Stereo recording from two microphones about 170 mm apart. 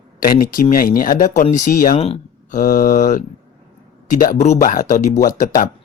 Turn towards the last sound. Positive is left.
turn(degrees=50)  # may be behind; listen again after turning